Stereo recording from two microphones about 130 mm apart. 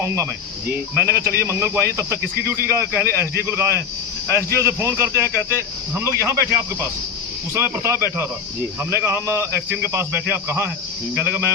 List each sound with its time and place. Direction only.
0.9 s a man's voice: 20° right (ahead or behind)